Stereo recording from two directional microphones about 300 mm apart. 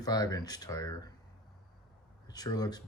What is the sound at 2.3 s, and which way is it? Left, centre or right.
Speech, centre.